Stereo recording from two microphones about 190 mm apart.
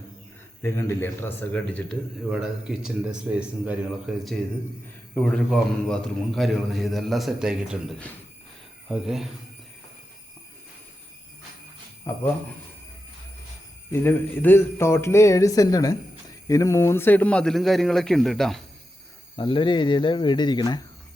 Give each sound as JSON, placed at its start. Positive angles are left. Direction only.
{"t": 0.6, "sound": "a man's voice", "side_deg": 10}
{"t": 12.1, "sound": "a man's voice", "side_deg": 10}
{"t": 13.9, "sound": "a man's voice", "side_deg": 10}
{"t": 19.4, "sound": "speech", "side_deg": 25}